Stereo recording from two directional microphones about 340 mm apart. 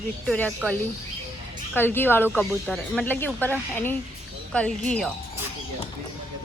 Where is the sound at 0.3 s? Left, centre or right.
Centre.